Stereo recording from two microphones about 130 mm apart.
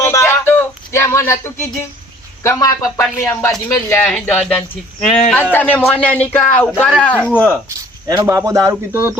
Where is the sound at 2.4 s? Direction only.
25° left (ahead or behind).